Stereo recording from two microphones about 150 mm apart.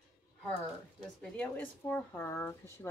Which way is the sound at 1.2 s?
10° left (ahead or behind).